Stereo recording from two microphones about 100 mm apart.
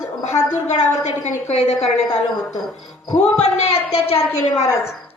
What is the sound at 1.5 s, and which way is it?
Speech, 90° left.